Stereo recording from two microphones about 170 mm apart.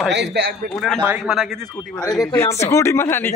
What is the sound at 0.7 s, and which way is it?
Speech, centre (ahead or behind).